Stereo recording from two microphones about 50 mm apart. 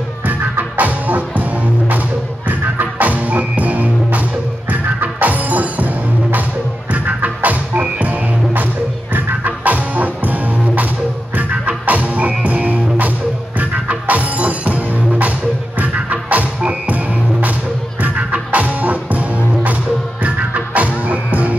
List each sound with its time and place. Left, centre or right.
0.3 s music: right